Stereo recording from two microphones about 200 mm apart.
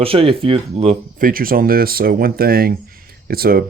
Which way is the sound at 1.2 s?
45° right (ahead or behind).